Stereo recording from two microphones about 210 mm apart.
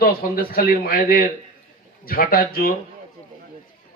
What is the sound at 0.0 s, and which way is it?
Speech, 45° left (ahead or behind).